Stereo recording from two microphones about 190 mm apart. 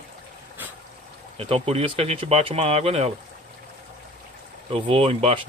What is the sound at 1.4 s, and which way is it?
Speech, 30° right (ahead or behind).